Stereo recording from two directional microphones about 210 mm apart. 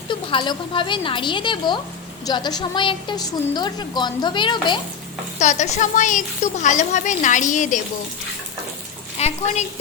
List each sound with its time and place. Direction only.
0.1 s a woman's voice: 25° left (ahead or behind)
5.4 s speech: 35° left (ahead or behind)
9.1 s speech: 30° left (ahead or behind)